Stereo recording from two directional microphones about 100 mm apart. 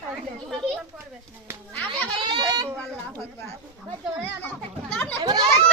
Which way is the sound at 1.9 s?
50° right (ahead or behind).